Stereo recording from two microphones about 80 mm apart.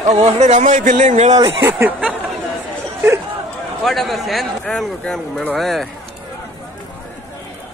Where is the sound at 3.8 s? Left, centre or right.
Centre.